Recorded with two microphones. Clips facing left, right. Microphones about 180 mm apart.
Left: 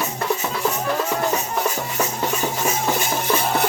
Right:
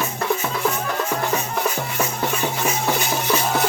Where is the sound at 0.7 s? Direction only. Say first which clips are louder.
Left 1 dB; 20° left (ahead or behind).